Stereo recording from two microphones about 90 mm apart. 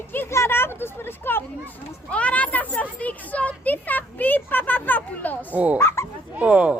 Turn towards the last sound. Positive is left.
turn(degrees=-15)  # may be behind; listen again after turning